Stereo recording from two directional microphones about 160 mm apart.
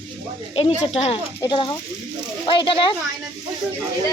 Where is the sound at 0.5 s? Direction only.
40° left (ahead or behind).